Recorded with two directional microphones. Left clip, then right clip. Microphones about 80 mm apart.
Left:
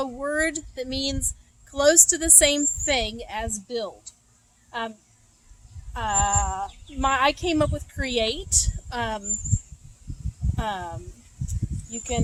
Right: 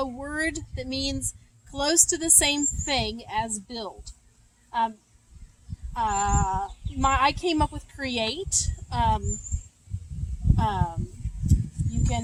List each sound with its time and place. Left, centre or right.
0.0 s a woman's voice: left
5.9 s speech: left
10.5 s speech: left
11.9 s speech: left